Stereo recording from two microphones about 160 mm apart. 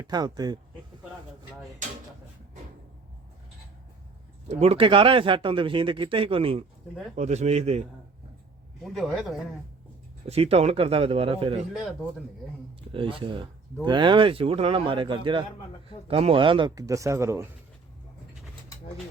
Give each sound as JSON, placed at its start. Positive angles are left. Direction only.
{"t": 0.0, "sound": "speech", "side_deg": -25}
{"t": 4.4, "sound": "speech", "side_deg": -40}
{"t": 8.8, "sound": "a man's voice", "side_deg": 0}
{"t": 10.2, "sound": "speech", "side_deg": -40}
{"t": 12.9, "sound": "speech", "side_deg": -35}